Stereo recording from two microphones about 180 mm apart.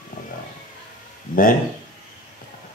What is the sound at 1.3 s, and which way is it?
Speech, 50° left (ahead or behind).